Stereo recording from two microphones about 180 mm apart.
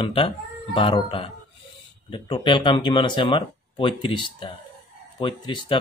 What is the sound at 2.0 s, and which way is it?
Speech, 25° left (ahead or behind).